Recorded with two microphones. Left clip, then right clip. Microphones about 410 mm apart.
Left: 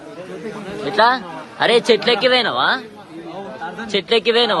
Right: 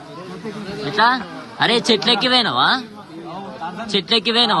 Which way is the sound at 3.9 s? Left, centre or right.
Centre.